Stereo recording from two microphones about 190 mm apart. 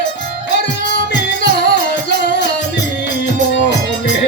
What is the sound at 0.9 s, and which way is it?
Music, 70° left (ahead or behind).